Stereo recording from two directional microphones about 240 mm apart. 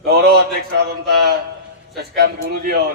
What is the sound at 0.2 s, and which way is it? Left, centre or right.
A man's voice, right.